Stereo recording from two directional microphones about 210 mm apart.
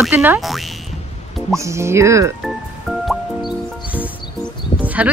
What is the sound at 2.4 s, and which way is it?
Music, centre (ahead or behind).